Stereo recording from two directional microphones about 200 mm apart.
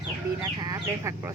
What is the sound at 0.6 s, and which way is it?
Speech, 15° right (ahead or behind).